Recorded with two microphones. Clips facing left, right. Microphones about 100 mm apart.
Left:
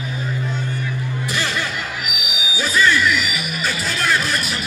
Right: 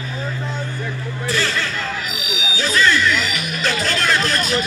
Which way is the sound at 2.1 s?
15° left (ahead or behind).